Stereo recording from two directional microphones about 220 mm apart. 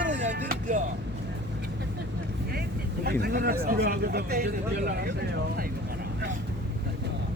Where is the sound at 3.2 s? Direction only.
45° right (ahead or behind).